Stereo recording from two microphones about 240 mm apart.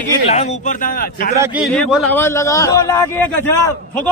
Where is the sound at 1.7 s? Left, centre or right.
Centre.